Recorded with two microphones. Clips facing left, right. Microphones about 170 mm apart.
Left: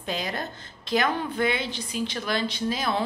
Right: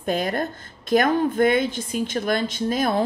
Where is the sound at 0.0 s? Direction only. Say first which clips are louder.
Right 7 dB; 50° right (ahead or behind).